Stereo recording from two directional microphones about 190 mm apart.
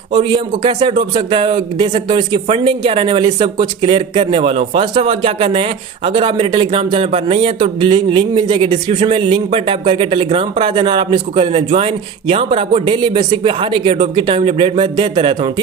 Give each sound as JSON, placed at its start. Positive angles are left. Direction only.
{"t": 0.1, "sound": "a man's voice", "side_deg": -25}